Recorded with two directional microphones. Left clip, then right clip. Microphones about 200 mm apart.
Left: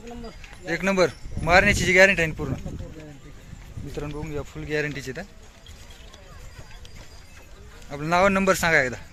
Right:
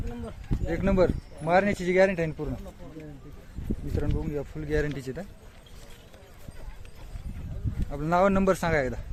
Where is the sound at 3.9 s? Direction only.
15° right (ahead or behind).